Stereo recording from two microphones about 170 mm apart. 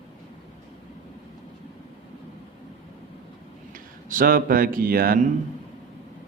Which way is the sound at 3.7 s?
55° right (ahead or behind).